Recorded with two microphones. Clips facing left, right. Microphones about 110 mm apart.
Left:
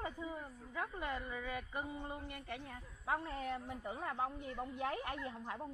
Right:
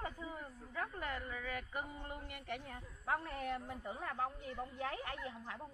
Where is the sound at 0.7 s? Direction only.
15° left (ahead or behind).